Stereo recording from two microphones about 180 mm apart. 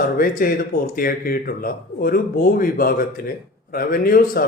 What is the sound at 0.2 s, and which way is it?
A man's voice, 55° left (ahead or behind).